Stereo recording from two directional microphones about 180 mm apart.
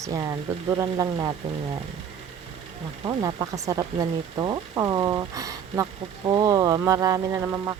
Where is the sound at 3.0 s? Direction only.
20° right (ahead or behind).